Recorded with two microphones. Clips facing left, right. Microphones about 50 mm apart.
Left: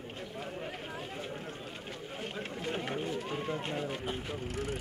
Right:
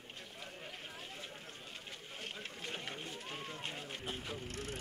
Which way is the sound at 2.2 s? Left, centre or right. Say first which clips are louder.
Left 7 dB; left.